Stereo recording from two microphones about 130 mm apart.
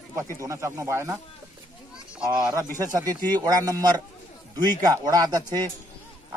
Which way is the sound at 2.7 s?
30° right (ahead or behind).